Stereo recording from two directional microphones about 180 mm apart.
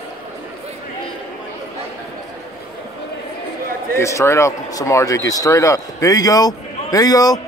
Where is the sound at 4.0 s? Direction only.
15° left (ahead or behind).